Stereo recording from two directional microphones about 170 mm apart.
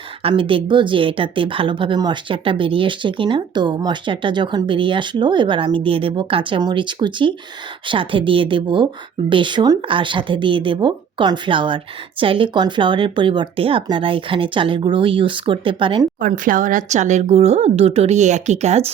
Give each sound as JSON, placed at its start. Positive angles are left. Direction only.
{"t": 0.2, "sound": "a woman's voice", "side_deg": -30}
{"t": 16.2, "sound": "speech", "side_deg": -50}